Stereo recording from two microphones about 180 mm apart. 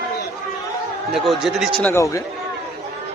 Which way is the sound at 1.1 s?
Centre (ahead or behind).